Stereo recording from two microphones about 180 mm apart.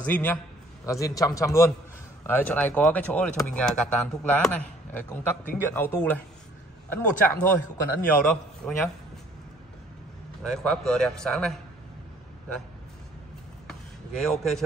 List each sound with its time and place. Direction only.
0.0 s a man's voice: 10° left (ahead or behind)
10.4 s speech: 5° left (ahead or behind)
14.2 s speech: centre (ahead or behind)